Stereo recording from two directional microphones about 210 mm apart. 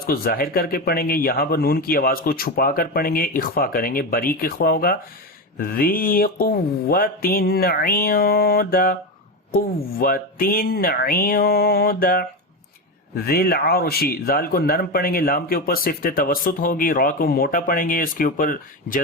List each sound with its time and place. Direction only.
0.0 s speech: 45° left (ahead or behind)
13.2 s speech: 45° left (ahead or behind)